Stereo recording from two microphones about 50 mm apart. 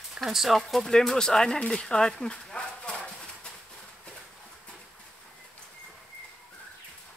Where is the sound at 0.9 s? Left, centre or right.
Centre.